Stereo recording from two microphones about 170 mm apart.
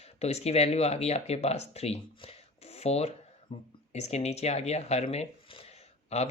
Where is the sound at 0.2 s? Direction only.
40° left (ahead or behind).